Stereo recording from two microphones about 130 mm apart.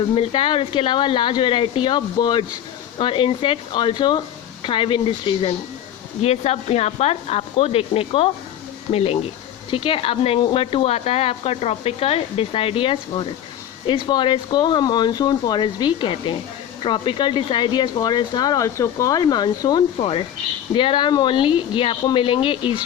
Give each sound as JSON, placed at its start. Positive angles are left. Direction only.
{"t": 0.1, "sound": "speech", "side_deg": 40}
{"t": 6.2, "sound": "speech", "side_deg": 55}
{"t": 20.0, "sound": "speech", "side_deg": 45}